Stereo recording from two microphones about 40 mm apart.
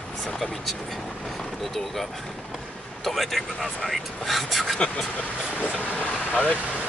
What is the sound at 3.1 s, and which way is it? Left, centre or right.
Speech, centre.